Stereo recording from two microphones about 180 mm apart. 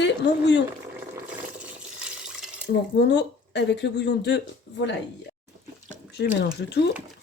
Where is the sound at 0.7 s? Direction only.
10° right (ahead or behind).